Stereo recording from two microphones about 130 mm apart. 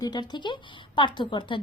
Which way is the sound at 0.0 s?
30° left (ahead or behind).